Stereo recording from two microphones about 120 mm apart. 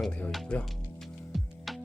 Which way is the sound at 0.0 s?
10° left (ahead or behind).